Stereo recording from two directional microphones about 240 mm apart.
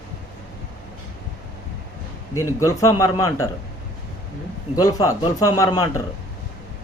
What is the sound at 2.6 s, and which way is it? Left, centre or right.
Speech, centre.